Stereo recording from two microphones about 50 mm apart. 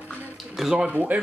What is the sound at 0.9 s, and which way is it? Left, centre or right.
Speech, right.